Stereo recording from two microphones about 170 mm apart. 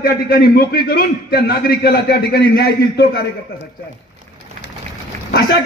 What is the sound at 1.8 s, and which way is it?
A man's voice, 75° left (ahead or behind).